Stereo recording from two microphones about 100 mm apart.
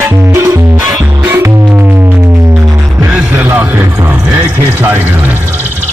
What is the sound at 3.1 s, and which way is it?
Music, 15° right (ahead or behind).